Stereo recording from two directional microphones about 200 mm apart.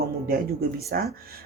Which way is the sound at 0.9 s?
50° right (ahead or behind).